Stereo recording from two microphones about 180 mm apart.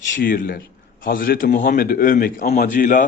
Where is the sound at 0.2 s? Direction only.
50° left (ahead or behind).